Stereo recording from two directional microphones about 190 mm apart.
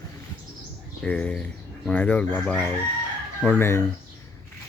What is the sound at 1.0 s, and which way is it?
Speech, 5° left (ahead or behind).